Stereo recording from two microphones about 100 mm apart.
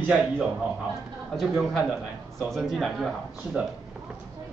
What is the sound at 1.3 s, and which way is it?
A man's voice, centre (ahead or behind).